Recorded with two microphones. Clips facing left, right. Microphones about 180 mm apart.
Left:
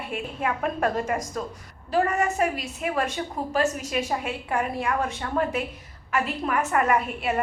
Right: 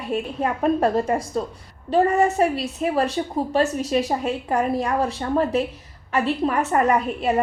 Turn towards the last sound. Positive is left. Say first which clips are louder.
# right 4 dB
turn(degrees=-35)  # may be behind; listen again after turning